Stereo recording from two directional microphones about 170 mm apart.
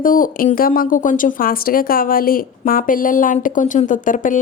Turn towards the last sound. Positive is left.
turn(degrees=50)  # may be behind; listen again after turning